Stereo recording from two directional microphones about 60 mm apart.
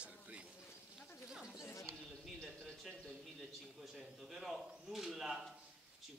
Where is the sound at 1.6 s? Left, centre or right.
Left.